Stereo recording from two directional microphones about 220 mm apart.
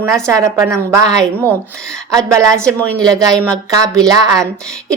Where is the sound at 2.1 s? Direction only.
15° right (ahead or behind).